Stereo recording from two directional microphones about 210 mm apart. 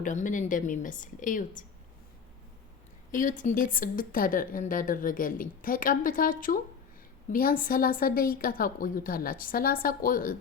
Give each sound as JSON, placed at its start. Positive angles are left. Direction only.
{"t": 0.0, "sound": "a woman's voice", "side_deg": 35}
{"t": 3.1, "sound": "a woman's voice", "side_deg": 40}